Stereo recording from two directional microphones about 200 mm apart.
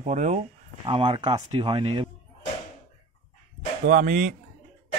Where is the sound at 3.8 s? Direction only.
40° right (ahead or behind).